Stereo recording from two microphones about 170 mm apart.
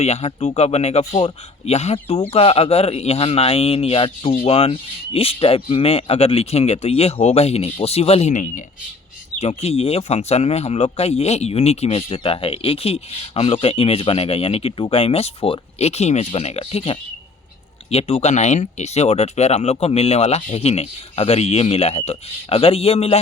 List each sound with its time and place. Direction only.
0.0 s speech: 40° left (ahead or behind)